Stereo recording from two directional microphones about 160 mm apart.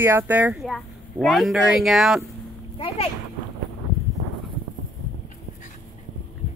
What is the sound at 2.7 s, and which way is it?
Speech, 40° left (ahead or behind).